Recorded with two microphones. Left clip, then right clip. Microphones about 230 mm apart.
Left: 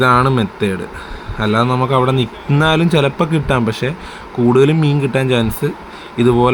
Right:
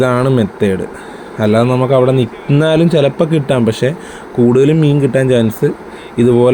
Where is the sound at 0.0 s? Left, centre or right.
Centre.